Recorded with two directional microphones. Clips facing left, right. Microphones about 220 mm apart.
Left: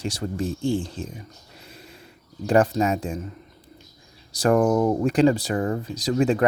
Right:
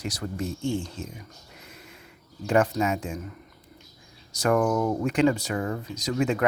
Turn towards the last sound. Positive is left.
turn(degrees=35)  # may be behind; listen again after turning